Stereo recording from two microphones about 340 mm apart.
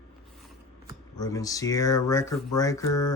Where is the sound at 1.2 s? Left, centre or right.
Centre.